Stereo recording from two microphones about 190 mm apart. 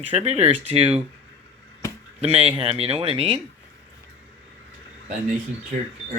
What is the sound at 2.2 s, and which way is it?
Speech, 30° right (ahead or behind).